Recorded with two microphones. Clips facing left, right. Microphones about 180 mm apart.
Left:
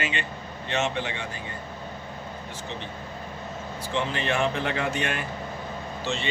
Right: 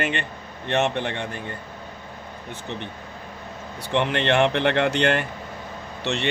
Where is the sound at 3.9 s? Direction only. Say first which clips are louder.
Right 6 dB; 70° right (ahead or behind).